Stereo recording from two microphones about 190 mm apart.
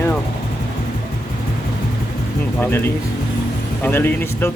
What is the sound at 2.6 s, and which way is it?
Speech, 10° left (ahead or behind).